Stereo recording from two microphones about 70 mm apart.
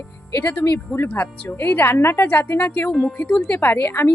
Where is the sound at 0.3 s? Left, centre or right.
Left.